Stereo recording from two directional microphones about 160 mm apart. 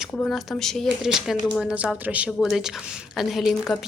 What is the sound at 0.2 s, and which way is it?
A woman's voice, 5° left (ahead or behind).